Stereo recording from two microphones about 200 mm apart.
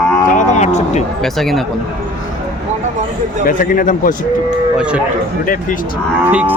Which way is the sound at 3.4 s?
40° left (ahead or behind).